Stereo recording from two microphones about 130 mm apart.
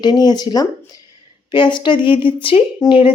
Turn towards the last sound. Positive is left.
turn(degrees=40)  # may be behind; listen again after turning